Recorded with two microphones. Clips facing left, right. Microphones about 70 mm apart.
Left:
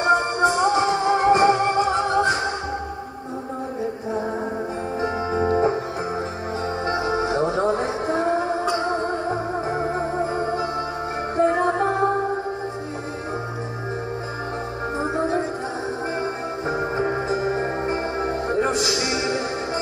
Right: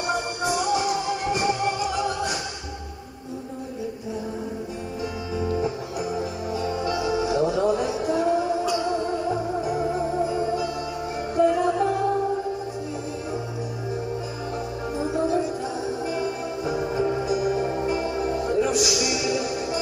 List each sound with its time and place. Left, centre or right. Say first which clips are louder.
0.0 s music: left 8 dB; left
5.4 s music: left 6 dB; left
15.0 s music: even; left